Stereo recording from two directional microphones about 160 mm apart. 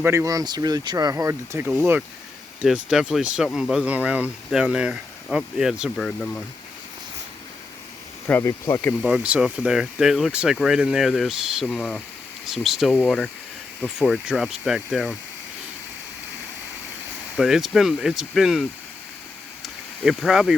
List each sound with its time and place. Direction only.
0.0 s speech: 15° right (ahead or behind); by 6.4 s 5° left (ahead or behind)
8.3 s speech: 15° left (ahead or behind)
9.0 s speech: 5° right (ahead or behind)
17.3 s speech: centre (ahead or behind)
19.6 s a sound: centre (ahead or behind)